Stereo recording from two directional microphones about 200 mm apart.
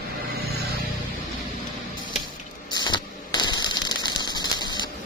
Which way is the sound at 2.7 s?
20° left (ahead or behind).